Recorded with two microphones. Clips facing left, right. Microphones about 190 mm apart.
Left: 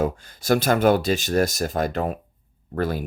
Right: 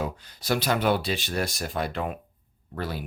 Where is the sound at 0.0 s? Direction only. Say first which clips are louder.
Left 7 dB; 50° left (ahead or behind).